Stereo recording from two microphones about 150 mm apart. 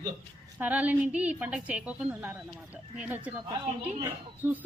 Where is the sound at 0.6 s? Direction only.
10° right (ahead or behind).